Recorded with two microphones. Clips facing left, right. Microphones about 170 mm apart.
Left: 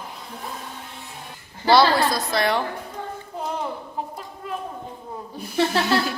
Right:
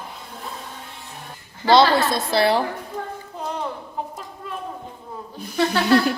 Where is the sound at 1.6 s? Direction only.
20° right (ahead or behind).